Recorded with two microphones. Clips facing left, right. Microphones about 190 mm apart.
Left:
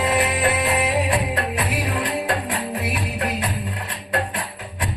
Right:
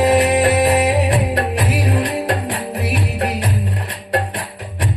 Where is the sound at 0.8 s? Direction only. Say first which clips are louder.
Right 5 dB; 75° right (ahead or behind).